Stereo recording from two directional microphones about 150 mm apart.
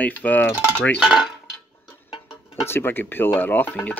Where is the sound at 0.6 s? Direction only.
10° right (ahead or behind).